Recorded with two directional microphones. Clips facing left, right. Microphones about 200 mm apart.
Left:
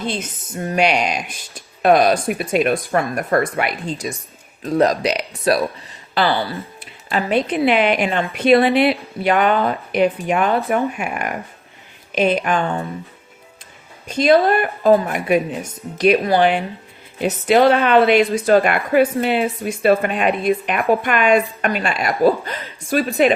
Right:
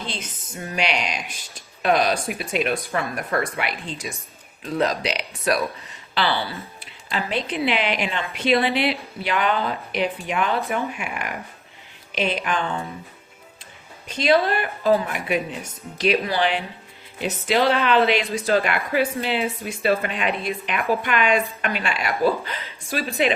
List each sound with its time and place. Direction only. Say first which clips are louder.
0.0 s speech: left 8 dB; 50° left (ahead or behind)
5.5 s speech: left 5 dB; 35° left (ahead or behind)
6.1 s speech: left 5 dB; 45° left (ahead or behind)
14.1 s speech: left 5 dB; 45° left (ahead or behind)
18.2 s a woman's voice: left 10 dB; centre (ahead or behind)
18.4 s speech: left 6 dB; 50° left (ahead or behind)